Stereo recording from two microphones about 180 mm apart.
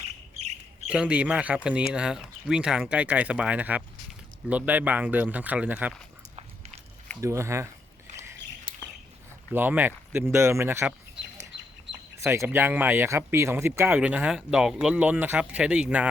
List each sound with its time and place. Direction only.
0.9 s speech: 5° right (ahead or behind)
7.2 s speech: 15° right (ahead or behind)
9.6 s speech: 10° right (ahead or behind)
12.1 s speech: 15° right (ahead or behind)